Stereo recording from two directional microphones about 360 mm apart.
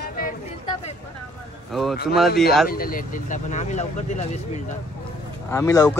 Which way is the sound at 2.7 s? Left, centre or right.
Left.